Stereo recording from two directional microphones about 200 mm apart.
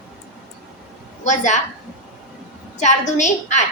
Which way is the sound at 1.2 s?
40° left (ahead or behind).